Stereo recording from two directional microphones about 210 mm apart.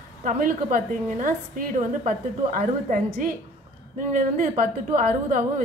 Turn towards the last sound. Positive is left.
turn(degrees=-35)  # may be behind; listen again after turning